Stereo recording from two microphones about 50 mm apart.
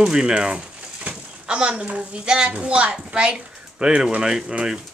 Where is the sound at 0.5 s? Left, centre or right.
Right.